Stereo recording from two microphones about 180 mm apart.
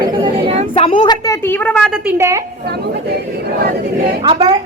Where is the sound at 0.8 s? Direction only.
30° left (ahead or behind).